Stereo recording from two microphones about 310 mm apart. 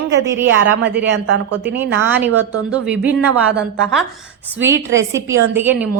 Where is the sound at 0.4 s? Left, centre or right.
Right.